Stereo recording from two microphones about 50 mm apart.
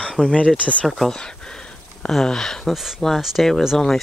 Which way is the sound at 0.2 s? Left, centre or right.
Left.